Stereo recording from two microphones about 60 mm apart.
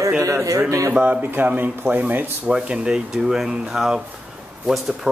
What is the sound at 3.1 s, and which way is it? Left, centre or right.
A woman's voice, centre.